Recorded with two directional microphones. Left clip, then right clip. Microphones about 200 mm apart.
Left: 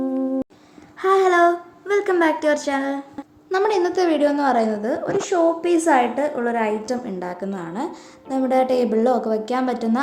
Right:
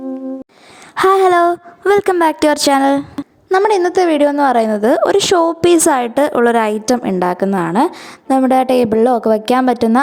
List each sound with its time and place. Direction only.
0.9 s a woman's voice: 55° right (ahead or behind)
3.5 s a woman's voice: 40° right (ahead or behind)